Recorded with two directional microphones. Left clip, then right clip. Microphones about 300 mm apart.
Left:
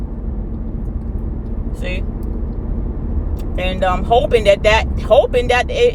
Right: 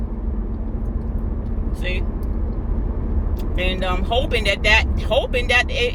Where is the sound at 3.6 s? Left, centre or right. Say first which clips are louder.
Left 6 dB; centre.